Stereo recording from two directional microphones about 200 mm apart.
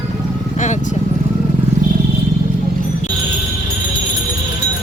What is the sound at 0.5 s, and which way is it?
Vehicle, 35° left (ahead or behind).